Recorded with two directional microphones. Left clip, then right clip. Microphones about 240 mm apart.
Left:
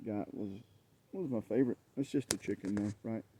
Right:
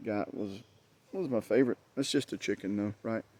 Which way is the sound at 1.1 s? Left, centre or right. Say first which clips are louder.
Right 6 dB; centre.